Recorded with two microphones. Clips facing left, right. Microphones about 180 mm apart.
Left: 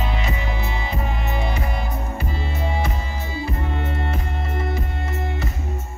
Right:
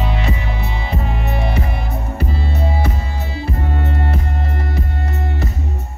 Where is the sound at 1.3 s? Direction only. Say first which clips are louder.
Right 3 dB; 65° right (ahead or behind).